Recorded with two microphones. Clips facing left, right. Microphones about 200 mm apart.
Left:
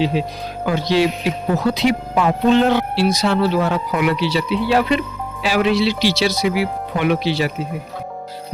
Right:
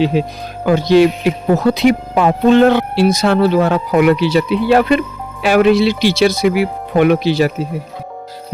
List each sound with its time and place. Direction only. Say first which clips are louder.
0.1 s speech: right 4 dB; 50° right (ahead or behind)